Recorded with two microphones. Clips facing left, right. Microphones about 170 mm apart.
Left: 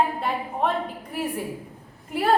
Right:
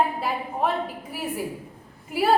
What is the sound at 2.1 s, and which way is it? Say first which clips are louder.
Speech: right 1 dB; 5° right (ahead or behind).